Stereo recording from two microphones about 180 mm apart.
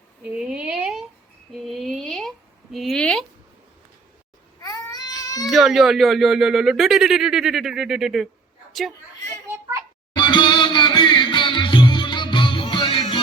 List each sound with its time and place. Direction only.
0.3 s a sound: 5° right (ahead or behind)
2.7 s speech: centre (ahead or behind)
4.6 s baby cry: 20° left (ahead or behind)
5.5 s speech: centre (ahead or behind)
10.2 s music: 25° left (ahead or behind)